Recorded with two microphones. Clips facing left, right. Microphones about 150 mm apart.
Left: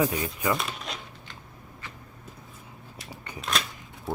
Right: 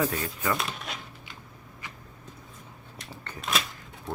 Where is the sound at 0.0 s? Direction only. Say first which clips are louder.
Left 2 dB; 15° left (ahead or behind).